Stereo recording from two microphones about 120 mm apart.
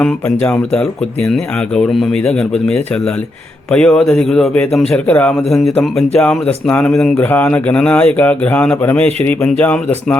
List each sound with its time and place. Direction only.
0.4 s a man's voice: 10° left (ahead or behind)